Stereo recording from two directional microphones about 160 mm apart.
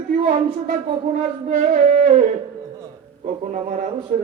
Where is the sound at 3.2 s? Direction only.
50° right (ahead or behind).